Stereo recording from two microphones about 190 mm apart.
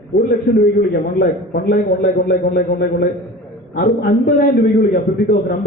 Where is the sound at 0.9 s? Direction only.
55° left (ahead or behind).